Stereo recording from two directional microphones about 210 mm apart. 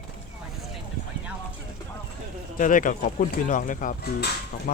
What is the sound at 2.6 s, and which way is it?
Speech, 40° left (ahead or behind).